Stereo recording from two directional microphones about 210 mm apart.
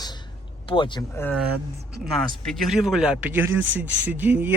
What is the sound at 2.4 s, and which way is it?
Speech, centre (ahead or behind).